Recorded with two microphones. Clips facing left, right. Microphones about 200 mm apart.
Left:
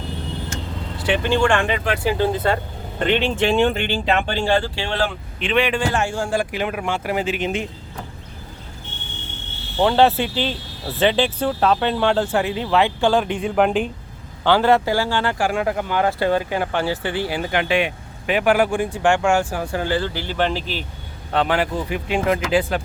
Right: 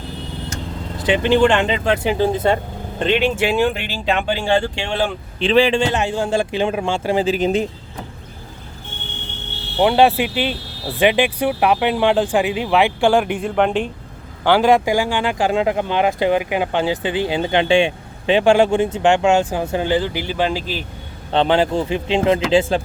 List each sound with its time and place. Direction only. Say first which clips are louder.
1.0 s speech: right 4 dB; 20° right (ahead or behind)
3.2 s speech: even; 5° right (ahead or behind)
4.4 s speech: right 1 dB; 15° right (ahead or behind)
5.4 s speech: right 5 dB; 30° right (ahead or behind)
9.7 s speech: right 2 dB; 15° right (ahead or behind)
13.4 s speech: even; centre (ahead or behind)
14.4 s speech: right 2 dB; 15° right (ahead or behind)
21.3 s speech: right 4 dB; 25° right (ahead or behind)